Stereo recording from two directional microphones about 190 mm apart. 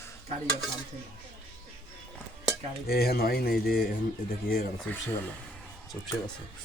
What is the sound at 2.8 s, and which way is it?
Speech, 55° left (ahead or behind).